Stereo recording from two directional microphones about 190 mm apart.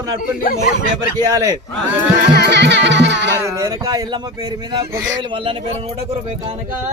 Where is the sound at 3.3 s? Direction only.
15° right (ahead or behind).